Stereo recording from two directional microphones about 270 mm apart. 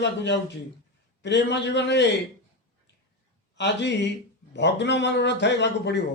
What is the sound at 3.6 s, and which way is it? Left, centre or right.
A man's voice, left.